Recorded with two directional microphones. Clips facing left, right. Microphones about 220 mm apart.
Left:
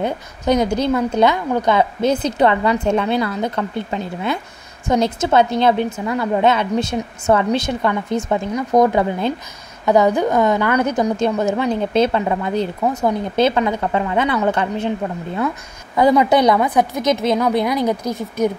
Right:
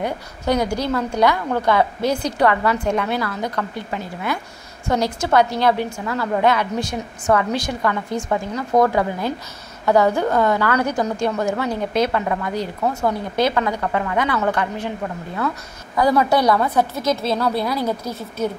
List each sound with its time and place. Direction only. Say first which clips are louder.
0.0 s a woman's voice: left 3 dB; 20° left (ahead or behind)
16.0 s a woman's voice: left 3 dB; 20° left (ahead or behind)